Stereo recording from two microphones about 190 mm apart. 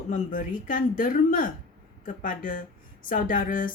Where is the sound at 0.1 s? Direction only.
45° left (ahead or behind).